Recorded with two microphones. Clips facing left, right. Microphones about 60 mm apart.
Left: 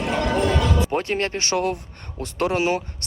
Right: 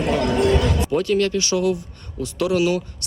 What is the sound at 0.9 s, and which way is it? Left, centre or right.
Speech, left.